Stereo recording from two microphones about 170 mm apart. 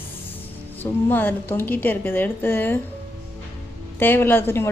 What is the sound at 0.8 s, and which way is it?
A woman's voice, 10° left (ahead or behind).